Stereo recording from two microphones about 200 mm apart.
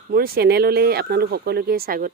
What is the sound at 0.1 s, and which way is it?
Speech, 50° right (ahead or behind).